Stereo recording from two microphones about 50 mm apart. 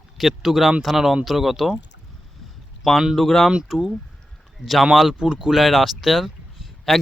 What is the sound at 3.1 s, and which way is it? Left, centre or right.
Speech, centre.